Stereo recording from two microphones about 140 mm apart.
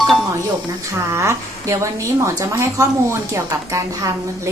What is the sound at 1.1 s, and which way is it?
A woman's voice, 20° right (ahead or behind).